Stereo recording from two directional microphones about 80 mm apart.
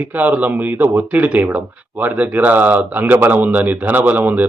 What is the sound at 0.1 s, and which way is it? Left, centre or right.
Speech, right.